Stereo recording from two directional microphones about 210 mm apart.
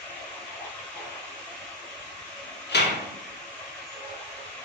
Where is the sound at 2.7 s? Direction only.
55° left (ahead or behind).